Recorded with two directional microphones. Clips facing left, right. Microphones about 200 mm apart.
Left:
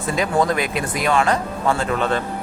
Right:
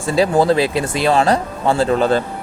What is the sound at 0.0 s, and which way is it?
Speech, 30° right (ahead or behind).